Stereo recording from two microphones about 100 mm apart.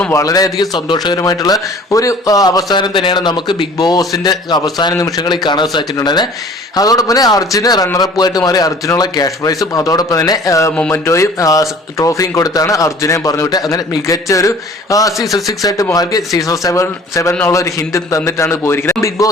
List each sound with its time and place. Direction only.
0.1 s a man's voice: 35° left (ahead or behind)